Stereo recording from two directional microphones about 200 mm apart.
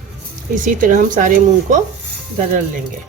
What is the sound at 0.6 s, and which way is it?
Speech, 40° right (ahead or behind).